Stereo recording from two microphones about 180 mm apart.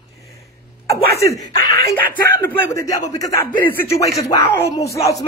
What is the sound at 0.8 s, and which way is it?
Speech, 15° left (ahead or behind).